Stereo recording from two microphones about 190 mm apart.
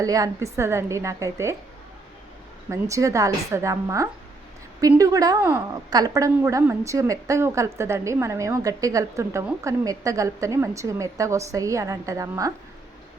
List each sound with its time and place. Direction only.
0.0 s a woman's voice: 20° right (ahead or behind)
2.6 s a woman's voice: 15° right (ahead or behind)